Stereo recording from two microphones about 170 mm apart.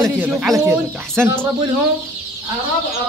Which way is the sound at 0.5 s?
15° right (ahead or behind).